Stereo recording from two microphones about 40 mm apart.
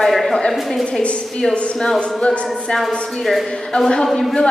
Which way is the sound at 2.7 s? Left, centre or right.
Centre.